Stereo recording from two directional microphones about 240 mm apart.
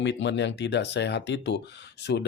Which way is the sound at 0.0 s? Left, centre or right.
Left.